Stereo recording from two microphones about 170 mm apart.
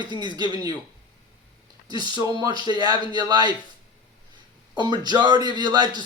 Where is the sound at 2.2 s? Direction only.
25° right (ahead or behind).